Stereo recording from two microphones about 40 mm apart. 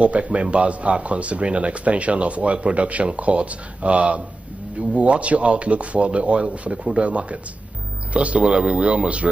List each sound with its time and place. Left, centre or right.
0.0 s speech: right